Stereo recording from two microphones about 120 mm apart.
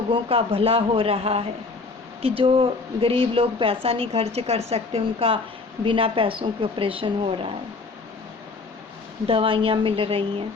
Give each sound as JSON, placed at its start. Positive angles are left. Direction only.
{"t": 0.1, "sound": "a woman's voice", "side_deg": -50}
{"t": 9.2, "sound": "a woman's voice", "side_deg": -50}